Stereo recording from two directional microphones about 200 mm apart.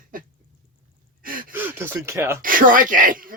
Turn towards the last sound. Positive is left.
turn(degrees=-45)  # may be behind; listen again after turning